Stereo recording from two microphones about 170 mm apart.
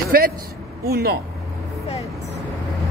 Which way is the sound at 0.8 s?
65° right (ahead or behind).